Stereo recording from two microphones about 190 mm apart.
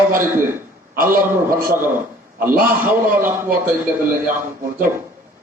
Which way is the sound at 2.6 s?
10° right (ahead or behind).